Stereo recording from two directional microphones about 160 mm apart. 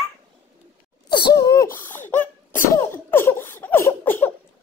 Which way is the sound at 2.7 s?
15° left (ahead or behind).